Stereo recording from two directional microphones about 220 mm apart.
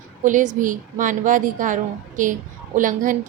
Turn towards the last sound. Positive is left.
turn(degrees=-35)  # may be behind; listen again after turning